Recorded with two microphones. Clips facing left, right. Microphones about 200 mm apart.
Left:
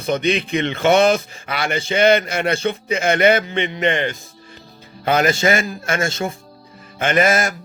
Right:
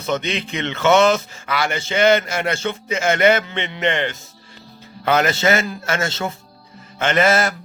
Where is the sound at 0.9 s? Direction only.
55° left (ahead or behind).